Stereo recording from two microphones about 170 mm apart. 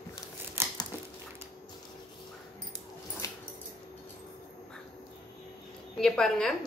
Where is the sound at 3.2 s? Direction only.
20° left (ahead or behind).